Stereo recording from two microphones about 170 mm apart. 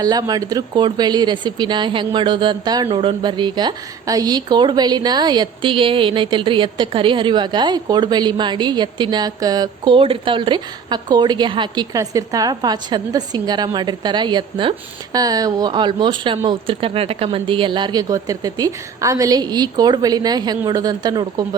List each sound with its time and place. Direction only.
0.0 s speech: 20° right (ahead or behind)